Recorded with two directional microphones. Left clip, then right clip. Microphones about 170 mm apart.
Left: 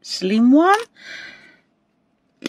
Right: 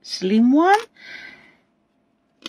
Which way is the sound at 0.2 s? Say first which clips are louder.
Left 2 dB; 20° left (ahead or behind).